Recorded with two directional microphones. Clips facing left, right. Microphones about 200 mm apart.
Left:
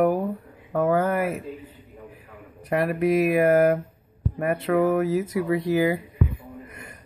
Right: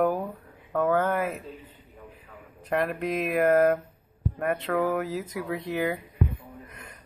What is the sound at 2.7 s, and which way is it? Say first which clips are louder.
Speech: left 5 dB; 5° left (ahead or behind).